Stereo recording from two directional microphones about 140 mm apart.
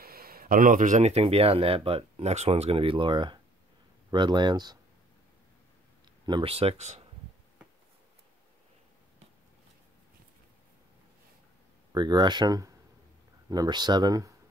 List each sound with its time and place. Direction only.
0.0 s speech: 90° right; by 4.7 s 30° right (ahead or behind)
6.4 s speech: 45° right (ahead or behind)
11.9 s speech: 30° right (ahead or behind)